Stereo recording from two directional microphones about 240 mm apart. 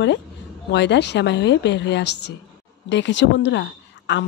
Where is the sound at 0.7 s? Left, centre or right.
Left.